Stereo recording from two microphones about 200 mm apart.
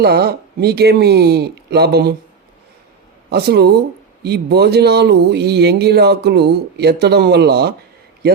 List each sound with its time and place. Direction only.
0.0 s speech: 50° right (ahead or behind)
3.2 s speech: 55° right (ahead or behind)